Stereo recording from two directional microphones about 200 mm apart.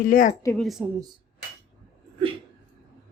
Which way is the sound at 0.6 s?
Centre (ahead or behind).